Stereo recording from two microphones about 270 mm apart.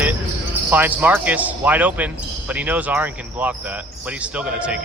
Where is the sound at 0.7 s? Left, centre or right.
Centre.